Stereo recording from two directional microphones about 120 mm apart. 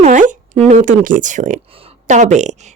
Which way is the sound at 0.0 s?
90° right.